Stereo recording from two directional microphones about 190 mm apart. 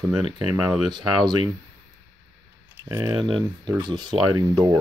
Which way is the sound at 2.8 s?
15° right (ahead or behind).